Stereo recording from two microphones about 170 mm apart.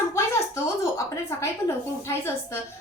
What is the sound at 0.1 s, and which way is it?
A woman's voice, 15° left (ahead or behind).